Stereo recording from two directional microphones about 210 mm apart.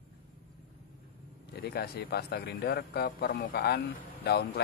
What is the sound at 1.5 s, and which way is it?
A man's voice, 50° left (ahead or behind).